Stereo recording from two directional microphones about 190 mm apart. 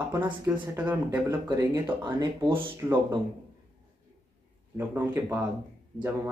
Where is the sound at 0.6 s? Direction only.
10° right (ahead or behind).